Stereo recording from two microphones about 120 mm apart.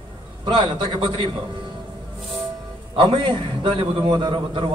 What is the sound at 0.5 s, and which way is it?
Speech, 40° right (ahead or behind).